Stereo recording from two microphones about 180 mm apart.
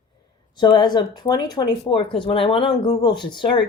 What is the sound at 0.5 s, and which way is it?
Speech, 25° left (ahead or behind).